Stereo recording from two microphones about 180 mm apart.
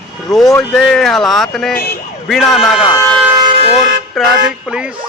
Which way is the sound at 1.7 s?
55° left (ahead or behind).